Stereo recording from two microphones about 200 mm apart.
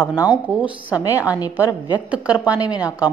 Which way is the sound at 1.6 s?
20° left (ahead or behind).